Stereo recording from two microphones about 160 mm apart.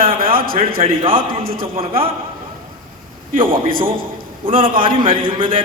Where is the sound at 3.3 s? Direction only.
35° right (ahead or behind).